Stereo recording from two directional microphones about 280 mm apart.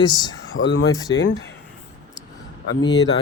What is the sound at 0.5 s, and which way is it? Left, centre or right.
Speech, left.